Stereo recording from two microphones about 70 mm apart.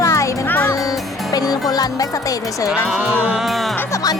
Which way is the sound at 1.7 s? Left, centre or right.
Left.